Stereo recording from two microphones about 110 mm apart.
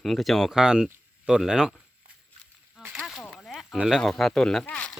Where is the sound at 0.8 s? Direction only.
20° right (ahead or behind).